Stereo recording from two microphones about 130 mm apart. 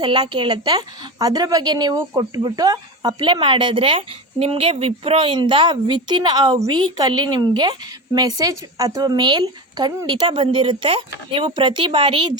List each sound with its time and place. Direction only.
0.0 s a woman's voice: 35° right (ahead or behind)
10.3 s a woman's voice: 45° right (ahead or behind)